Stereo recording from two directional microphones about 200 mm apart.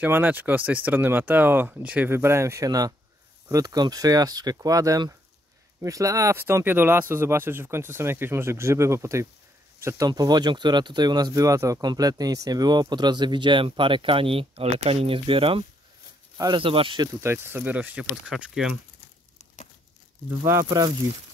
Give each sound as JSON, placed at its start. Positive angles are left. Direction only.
{"t": 0.0, "sound": "speech", "side_deg": -10}
{"t": 17.2, "sound": "speech", "side_deg": -10}
{"t": 20.2, "sound": "speech", "side_deg": -10}